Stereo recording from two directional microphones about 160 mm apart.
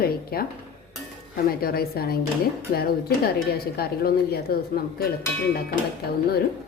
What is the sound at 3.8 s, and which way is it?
A woman's voice, 75° left (ahead or behind).